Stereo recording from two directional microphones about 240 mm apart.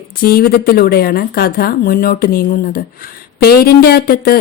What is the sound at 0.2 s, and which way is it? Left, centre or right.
Speech, left.